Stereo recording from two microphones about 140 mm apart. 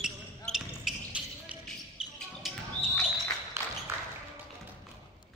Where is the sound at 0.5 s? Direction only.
5° right (ahead or behind).